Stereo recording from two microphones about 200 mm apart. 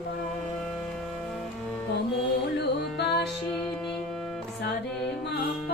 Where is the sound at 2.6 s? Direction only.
55° left (ahead or behind).